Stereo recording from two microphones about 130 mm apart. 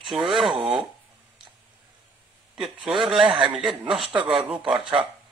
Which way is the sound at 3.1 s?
40° right (ahead or behind).